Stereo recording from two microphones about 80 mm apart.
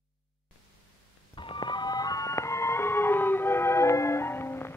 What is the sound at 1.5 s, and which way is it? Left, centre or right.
Music, left.